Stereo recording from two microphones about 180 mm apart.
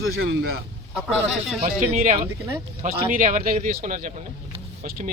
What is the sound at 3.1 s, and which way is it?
Speech, 50° right (ahead or behind).